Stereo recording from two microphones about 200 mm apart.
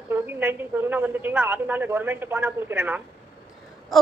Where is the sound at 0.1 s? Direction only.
10° right (ahead or behind).